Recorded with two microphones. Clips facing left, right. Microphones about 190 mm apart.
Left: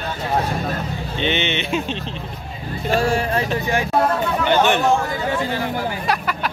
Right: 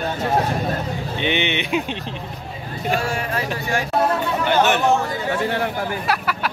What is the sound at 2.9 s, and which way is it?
Speech, 35° left (ahead or behind).